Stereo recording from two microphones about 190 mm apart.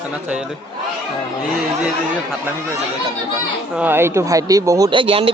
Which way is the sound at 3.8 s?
10° right (ahead or behind).